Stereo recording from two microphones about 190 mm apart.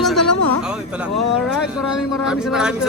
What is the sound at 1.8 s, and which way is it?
Speech, 5° right (ahead or behind).